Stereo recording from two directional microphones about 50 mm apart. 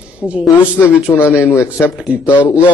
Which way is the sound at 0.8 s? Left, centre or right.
Left.